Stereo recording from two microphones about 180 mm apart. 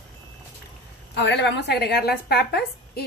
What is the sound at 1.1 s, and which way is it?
Speech, 75° left (ahead or behind).